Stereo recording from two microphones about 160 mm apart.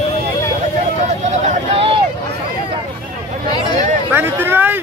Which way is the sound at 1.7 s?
35° right (ahead or behind).